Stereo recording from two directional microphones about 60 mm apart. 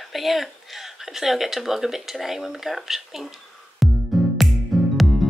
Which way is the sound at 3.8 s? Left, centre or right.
Centre.